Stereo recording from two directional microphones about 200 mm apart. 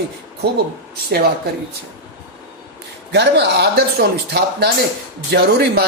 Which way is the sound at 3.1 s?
55° right (ahead or behind).